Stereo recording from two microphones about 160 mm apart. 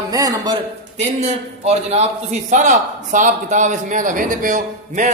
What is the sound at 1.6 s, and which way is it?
Speech, 45° right (ahead or behind).